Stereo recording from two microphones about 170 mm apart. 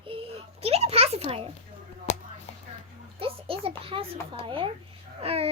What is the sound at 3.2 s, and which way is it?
A child's voice, 35° right (ahead or behind).